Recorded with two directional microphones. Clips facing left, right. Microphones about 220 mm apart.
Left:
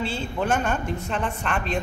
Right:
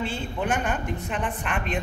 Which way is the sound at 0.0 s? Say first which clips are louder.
Left 2 dB; 15° right (ahead or behind).